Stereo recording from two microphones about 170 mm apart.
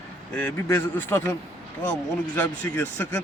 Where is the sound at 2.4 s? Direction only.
10° left (ahead or behind).